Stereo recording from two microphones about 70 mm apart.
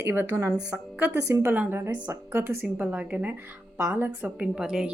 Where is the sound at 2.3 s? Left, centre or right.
Right.